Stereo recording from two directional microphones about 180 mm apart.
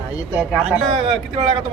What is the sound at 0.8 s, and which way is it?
Speech, 25° right (ahead or behind).